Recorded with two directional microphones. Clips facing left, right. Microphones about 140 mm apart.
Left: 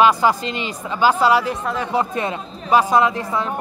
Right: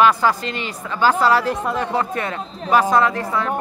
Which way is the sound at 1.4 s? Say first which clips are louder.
Right 1 dB; centre (ahead or behind).